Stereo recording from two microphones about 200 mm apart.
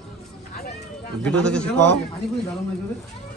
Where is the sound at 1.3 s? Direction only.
5° left (ahead or behind).